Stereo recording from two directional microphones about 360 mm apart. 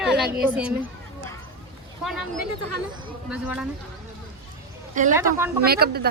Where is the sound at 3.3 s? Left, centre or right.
Centre.